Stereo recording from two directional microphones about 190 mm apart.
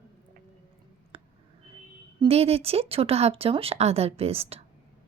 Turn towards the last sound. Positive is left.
turn(degrees=-30)  # may be behind; listen again after turning